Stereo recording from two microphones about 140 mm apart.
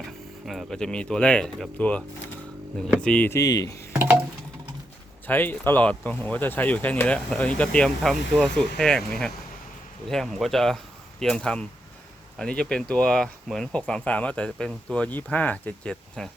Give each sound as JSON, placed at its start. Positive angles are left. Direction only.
{"t": 0.4, "sound": "speech", "side_deg": 0}
{"t": 3.3, "sound": "speech", "side_deg": 25}
{"t": 3.9, "sound": "a sound", "side_deg": -15}
{"t": 5.2, "sound": "speech", "side_deg": 15}